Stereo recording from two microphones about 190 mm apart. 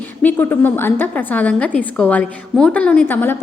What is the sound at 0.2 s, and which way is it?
A woman's voice, 10° left (ahead or behind).